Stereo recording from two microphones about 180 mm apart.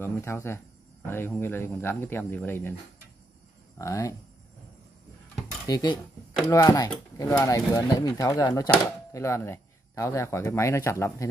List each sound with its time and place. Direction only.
0.0 s speech: 15° left (ahead or behind)
3.7 s speech: 15° left (ahead or behind)
5.7 s speech: 20° left (ahead or behind)